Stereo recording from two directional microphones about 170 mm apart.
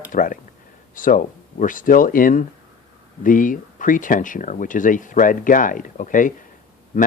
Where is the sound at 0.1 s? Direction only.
50° left (ahead or behind).